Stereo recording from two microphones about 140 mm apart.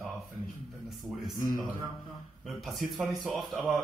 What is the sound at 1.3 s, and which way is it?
Speech, 80° left.